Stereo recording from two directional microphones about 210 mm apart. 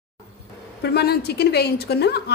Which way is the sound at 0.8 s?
50° left (ahead or behind).